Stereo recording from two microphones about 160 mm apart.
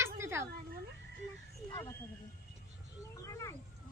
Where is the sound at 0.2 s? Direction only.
15° right (ahead or behind).